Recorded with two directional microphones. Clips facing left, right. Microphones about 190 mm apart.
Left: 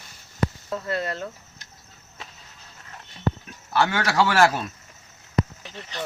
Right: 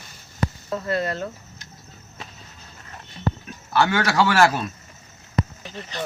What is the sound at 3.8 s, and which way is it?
Speech, 15° left (ahead or behind).